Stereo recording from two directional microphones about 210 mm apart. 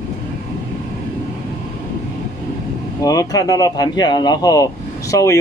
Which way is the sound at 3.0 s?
15° left (ahead or behind).